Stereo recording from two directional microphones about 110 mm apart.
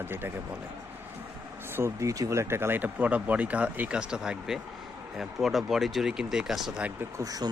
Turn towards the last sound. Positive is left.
turn(degrees=-35)  # may be behind; listen again after turning